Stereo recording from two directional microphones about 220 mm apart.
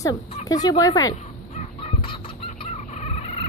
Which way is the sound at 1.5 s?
25° left (ahead or behind).